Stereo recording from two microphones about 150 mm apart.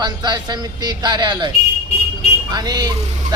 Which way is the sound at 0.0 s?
30° right (ahead or behind).